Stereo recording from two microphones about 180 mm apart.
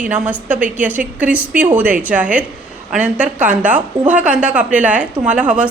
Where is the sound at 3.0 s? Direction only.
40° right (ahead or behind).